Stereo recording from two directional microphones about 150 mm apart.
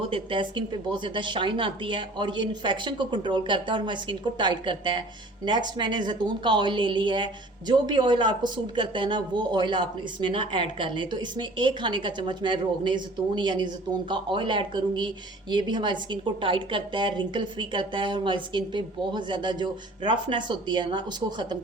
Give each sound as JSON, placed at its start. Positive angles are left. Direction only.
{"t": 0.1, "sound": "speech", "side_deg": -35}